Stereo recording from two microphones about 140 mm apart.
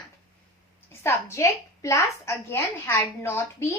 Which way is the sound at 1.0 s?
20° left (ahead or behind).